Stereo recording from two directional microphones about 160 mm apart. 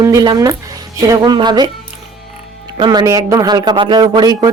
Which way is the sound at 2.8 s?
25° right (ahead or behind).